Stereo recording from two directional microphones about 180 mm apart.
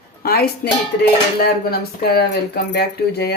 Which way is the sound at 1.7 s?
60° left (ahead or behind).